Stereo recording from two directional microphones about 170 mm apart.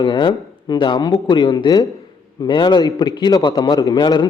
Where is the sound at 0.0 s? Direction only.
25° left (ahead or behind).